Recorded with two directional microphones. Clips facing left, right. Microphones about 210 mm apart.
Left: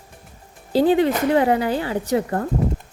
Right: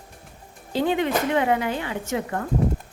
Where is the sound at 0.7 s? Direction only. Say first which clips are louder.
Left 6 dB; 35° left (ahead or behind).